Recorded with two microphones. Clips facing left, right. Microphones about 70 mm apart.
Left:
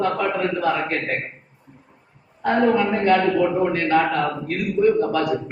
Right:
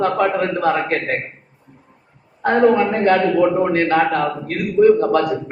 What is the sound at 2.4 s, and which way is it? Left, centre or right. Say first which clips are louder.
A man's voice: right 4 dB; right.